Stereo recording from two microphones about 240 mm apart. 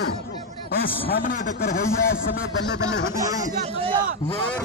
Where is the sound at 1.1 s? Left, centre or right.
Left.